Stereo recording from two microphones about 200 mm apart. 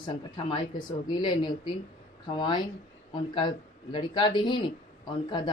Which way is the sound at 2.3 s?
25° left (ahead or behind).